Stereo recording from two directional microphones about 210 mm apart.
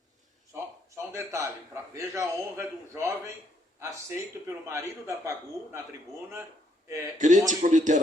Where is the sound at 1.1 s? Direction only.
15° right (ahead or behind).